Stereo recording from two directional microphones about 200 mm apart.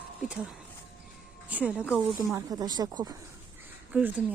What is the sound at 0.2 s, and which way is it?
Speech, 5° right (ahead or behind).